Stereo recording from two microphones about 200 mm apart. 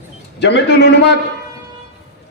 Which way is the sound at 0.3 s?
60° left (ahead or behind).